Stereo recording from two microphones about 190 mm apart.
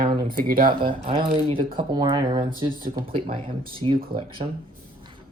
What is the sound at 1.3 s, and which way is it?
Speech, 30° right (ahead or behind).